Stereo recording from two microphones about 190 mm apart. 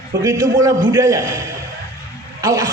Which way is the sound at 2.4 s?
20° right (ahead or behind).